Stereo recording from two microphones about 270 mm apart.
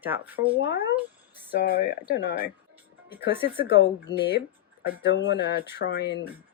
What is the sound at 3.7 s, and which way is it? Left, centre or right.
Speech, left.